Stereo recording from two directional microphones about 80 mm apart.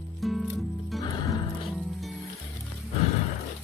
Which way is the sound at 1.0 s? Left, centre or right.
Left.